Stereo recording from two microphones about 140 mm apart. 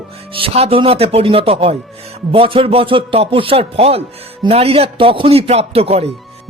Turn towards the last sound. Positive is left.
turn(degrees=-45)  # may be behind; listen again after turning